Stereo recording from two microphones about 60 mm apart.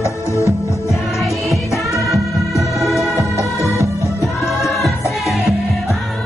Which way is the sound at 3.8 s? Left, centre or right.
Left.